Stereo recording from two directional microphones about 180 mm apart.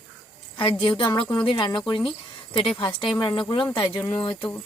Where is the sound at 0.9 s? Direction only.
25° left (ahead or behind).